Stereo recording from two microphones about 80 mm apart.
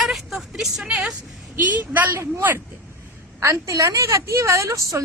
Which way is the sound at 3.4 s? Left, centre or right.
Right.